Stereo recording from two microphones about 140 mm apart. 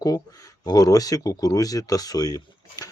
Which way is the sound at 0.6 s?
25° left (ahead or behind).